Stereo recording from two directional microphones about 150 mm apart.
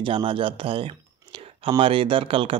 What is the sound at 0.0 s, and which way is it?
Speech, 35° right (ahead or behind).